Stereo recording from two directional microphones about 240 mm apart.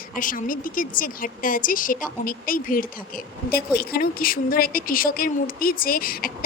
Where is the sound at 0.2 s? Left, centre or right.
Left.